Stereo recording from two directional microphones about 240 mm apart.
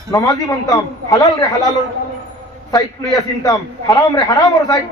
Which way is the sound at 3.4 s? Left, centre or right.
Centre.